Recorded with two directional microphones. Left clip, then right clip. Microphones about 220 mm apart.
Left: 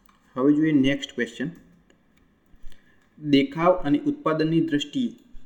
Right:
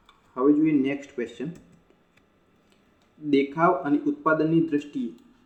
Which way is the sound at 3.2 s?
40° left (ahead or behind).